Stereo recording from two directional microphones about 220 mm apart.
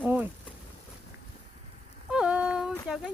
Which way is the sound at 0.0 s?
10° right (ahead or behind).